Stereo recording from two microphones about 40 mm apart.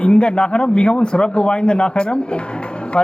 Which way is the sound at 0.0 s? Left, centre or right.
Left.